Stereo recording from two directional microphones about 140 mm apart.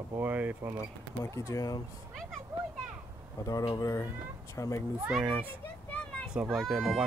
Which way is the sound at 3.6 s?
25° left (ahead or behind).